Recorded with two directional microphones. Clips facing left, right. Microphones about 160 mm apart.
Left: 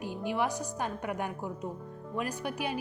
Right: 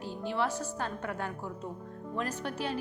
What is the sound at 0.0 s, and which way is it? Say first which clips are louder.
A woman's voice: left 1 dB; 15° left (ahead or behind).